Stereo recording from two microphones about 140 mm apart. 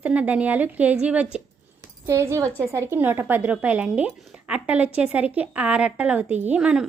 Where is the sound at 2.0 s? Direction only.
20° right (ahead or behind).